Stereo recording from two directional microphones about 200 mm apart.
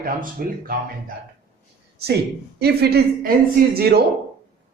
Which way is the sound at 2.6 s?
55° right (ahead or behind).